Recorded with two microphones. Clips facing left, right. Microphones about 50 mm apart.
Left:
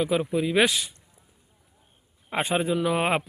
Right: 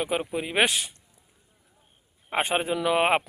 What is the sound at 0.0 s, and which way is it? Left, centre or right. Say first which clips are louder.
Speech: left 4 dB; right.